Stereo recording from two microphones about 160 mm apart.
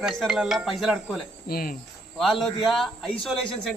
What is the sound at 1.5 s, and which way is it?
Cricket, 65° left (ahead or behind).